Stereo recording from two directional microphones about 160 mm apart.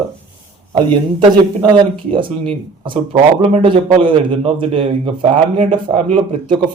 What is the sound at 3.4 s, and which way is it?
A man's voice, 35° right (ahead or behind).